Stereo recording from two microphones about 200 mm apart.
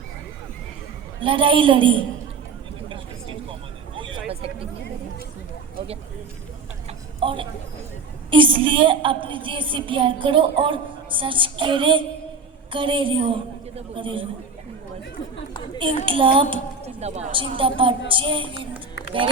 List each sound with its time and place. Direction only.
1.2 s a woman's voice: 25° right (ahead or behind)
2.9 s vehicle: 25° right (ahead or behind)
4.3 s a sound: 30° right (ahead or behind)
7.2 s a woman's voice: 25° right (ahead or behind)
16.0 s a woman's voice: 25° right (ahead or behind)